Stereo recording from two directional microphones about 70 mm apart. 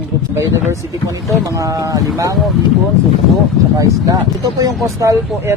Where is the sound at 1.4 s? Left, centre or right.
Right.